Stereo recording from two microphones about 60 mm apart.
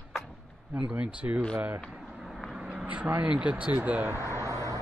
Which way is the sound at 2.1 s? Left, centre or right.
Centre.